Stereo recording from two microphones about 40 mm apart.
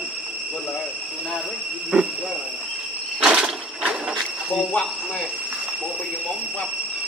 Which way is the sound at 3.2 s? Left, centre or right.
Right.